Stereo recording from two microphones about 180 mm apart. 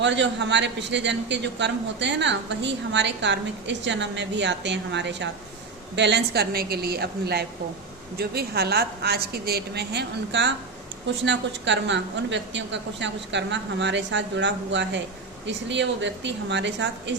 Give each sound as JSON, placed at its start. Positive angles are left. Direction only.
{"t": 0.0, "sound": "a man's voice", "side_deg": -80}